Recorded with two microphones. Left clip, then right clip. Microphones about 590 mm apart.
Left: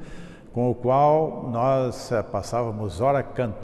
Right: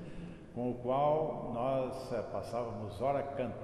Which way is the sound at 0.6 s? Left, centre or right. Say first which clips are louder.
Left 13 dB; left.